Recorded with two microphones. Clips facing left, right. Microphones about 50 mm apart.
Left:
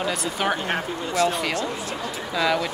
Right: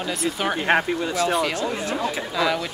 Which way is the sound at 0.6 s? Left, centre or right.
Right.